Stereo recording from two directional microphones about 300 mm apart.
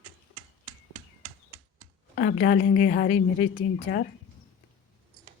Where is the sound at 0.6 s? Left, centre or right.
Right.